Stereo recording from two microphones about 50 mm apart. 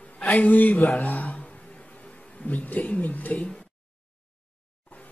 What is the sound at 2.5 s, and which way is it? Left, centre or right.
Speech, left.